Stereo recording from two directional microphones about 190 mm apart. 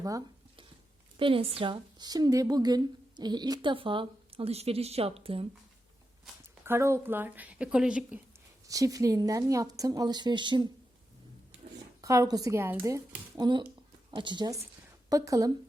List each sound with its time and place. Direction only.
0.0 s a sound: 20° right (ahead or behind)
1.1 s a woman's voice: 30° right (ahead or behind)
6.2 s speech: 10° right (ahead or behind)
8.6 s a woman's voice: 20° right (ahead or behind)
12.0 s a woman's voice: 15° right (ahead or behind)